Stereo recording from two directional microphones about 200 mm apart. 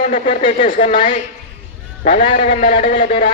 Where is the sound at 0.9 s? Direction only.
25° left (ahead or behind).